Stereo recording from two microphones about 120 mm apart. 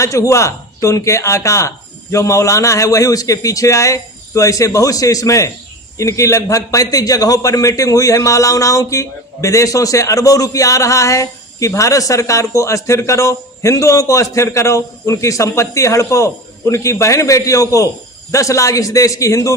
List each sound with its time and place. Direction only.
0.0 s a man's voice: 25° left (ahead or behind)